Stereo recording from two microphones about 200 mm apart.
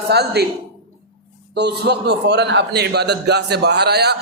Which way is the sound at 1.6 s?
55° right (ahead or behind).